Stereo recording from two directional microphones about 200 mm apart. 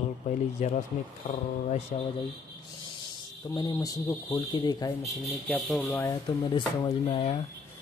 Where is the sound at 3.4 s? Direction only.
15° left (ahead or behind).